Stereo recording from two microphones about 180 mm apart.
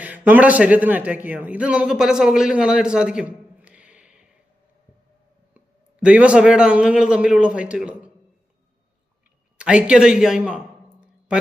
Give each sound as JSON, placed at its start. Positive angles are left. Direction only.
{"t": 0.0, "sound": "speech", "side_deg": -10}
{"t": 5.5, "sound": "a man's voice", "side_deg": -5}
{"t": 9.6, "sound": "a sound", "side_deg": -5}